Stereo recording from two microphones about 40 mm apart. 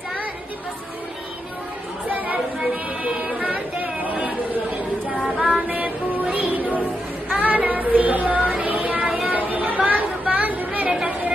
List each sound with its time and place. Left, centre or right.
2.0 s chatter: right
2.7 s a sound: right
3.8 s chatter: right
5.0 s child singing: right
5.7 s music: right
7.3 s child singing: right
8.6 s music: right
9.0 s a sound: centre
9.7 s chatter: right